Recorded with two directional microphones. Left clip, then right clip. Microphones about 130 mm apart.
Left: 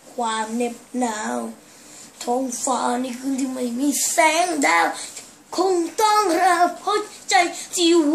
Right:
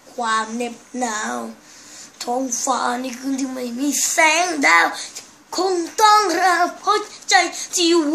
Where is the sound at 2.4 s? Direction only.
25° left (ahead or behind).